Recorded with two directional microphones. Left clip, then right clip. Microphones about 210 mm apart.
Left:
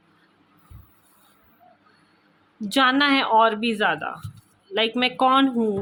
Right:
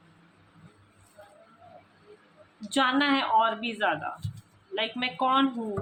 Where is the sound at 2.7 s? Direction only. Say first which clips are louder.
Left 6 dB; 50° left (ahead or behind).